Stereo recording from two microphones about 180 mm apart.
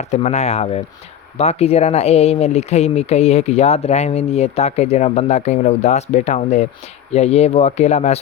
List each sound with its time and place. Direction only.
0.0 s speech: 40° left (ahead or behind)